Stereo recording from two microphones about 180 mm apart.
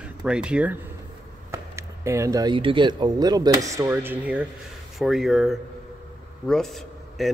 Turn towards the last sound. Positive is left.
turn(degrees=0)  # may be behind; listen again after turning